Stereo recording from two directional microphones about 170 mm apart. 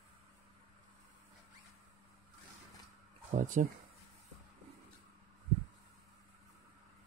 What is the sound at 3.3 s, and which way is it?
Speech, 50° right (ahead or behind).